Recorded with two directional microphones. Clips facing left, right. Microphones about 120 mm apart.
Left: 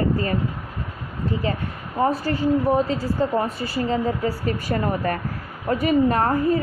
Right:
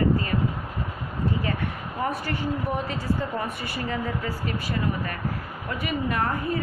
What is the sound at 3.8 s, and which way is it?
A woman's voice, 35° left (ahead or behind).